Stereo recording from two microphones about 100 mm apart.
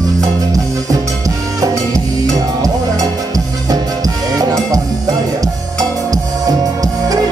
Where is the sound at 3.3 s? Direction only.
35° right (ahead or behind).